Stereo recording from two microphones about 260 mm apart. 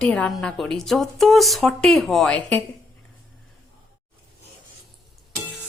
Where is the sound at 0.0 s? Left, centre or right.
Centre.